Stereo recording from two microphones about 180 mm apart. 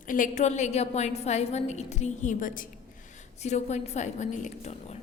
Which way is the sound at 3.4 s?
40° left (ahead or behind).